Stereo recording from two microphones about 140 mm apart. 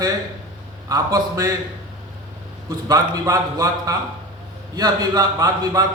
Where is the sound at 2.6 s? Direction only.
25° right (ahead or behind).